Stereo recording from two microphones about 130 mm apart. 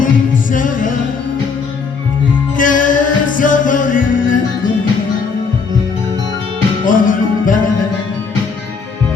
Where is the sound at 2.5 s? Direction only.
90° left.